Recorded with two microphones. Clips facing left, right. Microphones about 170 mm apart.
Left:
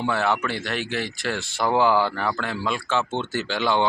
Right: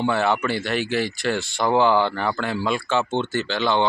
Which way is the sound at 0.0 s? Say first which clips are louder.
Right 2 dB; centre (ahead or behind).